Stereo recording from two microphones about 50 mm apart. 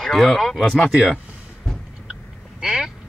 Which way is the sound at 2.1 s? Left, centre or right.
Centre.